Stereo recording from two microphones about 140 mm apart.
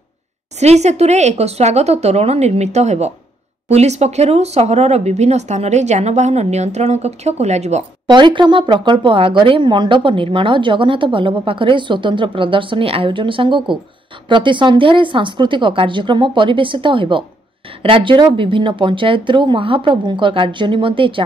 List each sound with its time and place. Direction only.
0.6 s speech: 50° right (ahead or behind)
8.1 s speech: 35° right (ahead or behind)